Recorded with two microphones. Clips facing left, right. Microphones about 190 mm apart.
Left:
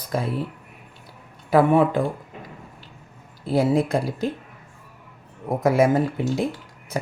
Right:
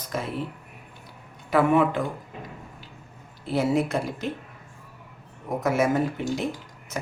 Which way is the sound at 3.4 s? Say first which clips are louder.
Left 3 dB; 35° left (ahead or behind).